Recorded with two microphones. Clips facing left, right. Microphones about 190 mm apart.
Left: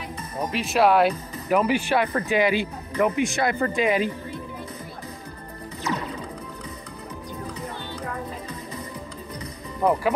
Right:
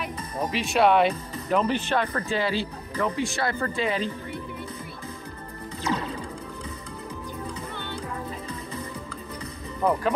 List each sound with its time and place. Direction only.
0.5 s speech: centre (ahead or behind)
5.9 s music: 30° right (ahead or behind)